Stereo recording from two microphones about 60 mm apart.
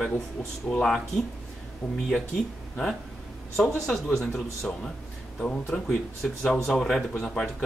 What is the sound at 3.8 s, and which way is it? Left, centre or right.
Speech, centre.